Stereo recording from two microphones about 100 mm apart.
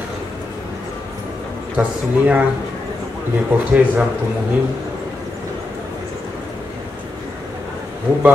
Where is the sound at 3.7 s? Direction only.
10° right (ahead or behind).